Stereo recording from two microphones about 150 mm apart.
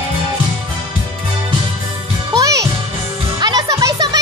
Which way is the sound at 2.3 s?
25° right (ahead or behind).